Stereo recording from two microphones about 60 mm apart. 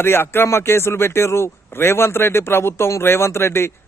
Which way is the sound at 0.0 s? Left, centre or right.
Left.